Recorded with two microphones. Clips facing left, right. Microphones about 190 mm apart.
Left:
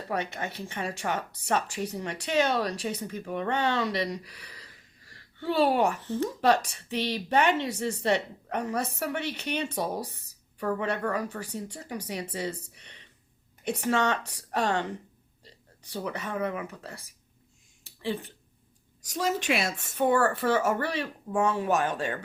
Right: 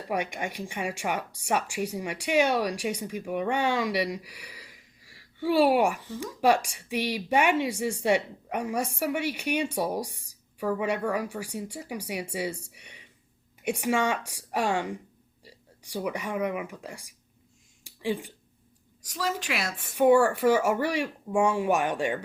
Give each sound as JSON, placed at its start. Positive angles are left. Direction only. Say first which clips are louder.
{"t": 0.1, "sound": "a woman's voice", "louder": "right 2 dB", "side_deg": -15}
{"t": 17.8, "sound": "a sound", "louder": "right 2 dB", "side_deg": -15}
{"t": 19.0, "sound": "a woman's voice", "louder": "left 3 dB", "side_deg": 20}
{"t": 19.8, "sound": "a woman's voice", "louder": "right 7 dB", "side_deg": -15}